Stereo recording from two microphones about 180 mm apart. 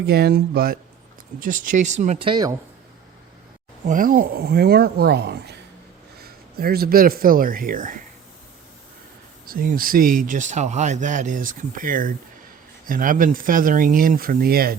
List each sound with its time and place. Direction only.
0.0 s speech: 60° right (ahead or behind)
1.5 s speech: 45° right (ahead or behind)
2.2 s speech: 25° right (ahead or behind)
3.8 s speech: 50° right (ahead or behind)
9.5 s speech: 55° right (ahead or behind)